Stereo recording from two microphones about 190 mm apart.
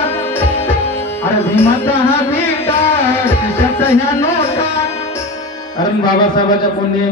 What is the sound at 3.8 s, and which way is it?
Music, 10° left (ahead or behind).